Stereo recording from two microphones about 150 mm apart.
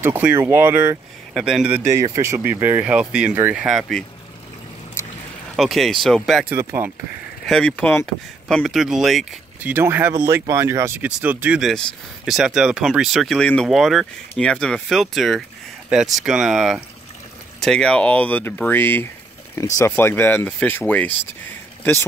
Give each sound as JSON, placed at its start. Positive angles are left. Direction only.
{"t": 0.0, "sound": "speech", "side_deg": -15}
{"t": 2.0, "sound": "speech", "side_deg": -20}
{"t": 5.6, "sound": "speech", "side_deg": 0}
{"t": 6.5, "sound": "speech", "side_deg": -15}
{"t": 7.4, "sound": "speech", "side_deg": 5}
{"t": 8.5, "sound": "speech", "side_deg": 0}